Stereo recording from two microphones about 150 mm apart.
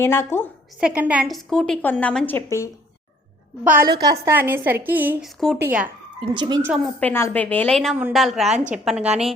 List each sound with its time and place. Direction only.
0.0 s a woman's voice: 15° left (ahead or behind)
0.8 s a woman's voice: 10° right (ahead or behind); by 2.6 s 15° left (ahead or behind)
3.6 s a woman's voice: 10° right (ahead or behind)
3.8 s a woman's voice: 90° right
4.1 s a woman's voice: 15° right (ahead or behind)
5.2 s a woman's voice: centre (ahead or behind)
5.5 s a woman's voice: 10° right (ahead or behind)
6.3 s speech: 30° right (ahead or behind)
7.0 s a woman's voice: 15° left (ahead or behind)
8.1 s a woman's voice: centre (ahead or behind)
8.4 s a woman's voice: 50° right (ahead or behind)
8.7 s a woman's voice: 5° right (ahead or behind)